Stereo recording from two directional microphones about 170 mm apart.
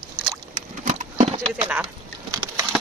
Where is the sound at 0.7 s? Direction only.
50° right (ahead or behind).